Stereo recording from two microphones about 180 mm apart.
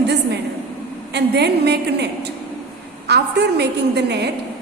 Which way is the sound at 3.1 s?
70° right (ahead or behind).